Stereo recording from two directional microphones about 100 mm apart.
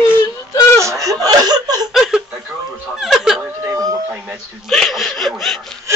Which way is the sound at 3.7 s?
35° right (ahead or behind).